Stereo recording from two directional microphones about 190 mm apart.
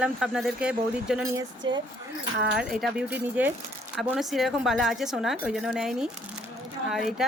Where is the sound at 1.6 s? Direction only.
25° right (ahead or behind).